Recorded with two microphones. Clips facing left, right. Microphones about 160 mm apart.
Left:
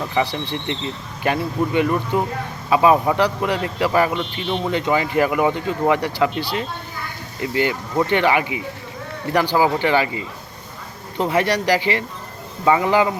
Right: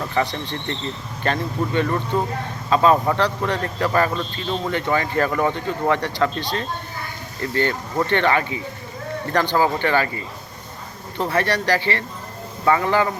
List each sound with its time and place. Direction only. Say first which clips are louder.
0.0 s a man's voice: left 1 dB; 10° left (ahead or behind)